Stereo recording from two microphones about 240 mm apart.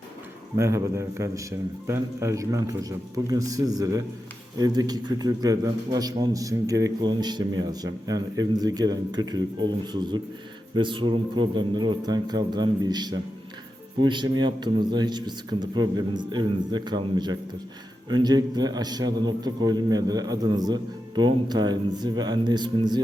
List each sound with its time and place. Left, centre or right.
0.5 s a man's voice: centre